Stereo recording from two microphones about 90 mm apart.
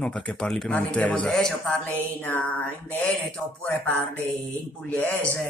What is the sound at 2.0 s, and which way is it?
Mantra, 20° left (ahead or behind).